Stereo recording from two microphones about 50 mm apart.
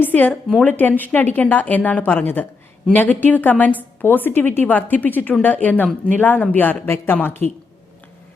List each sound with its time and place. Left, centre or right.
0.0 s a sound: left
0.6 s speech: left
4.0 s speech: left
6.8 s speech: left